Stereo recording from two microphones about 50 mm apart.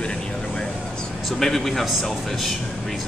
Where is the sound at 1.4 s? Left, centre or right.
Centre.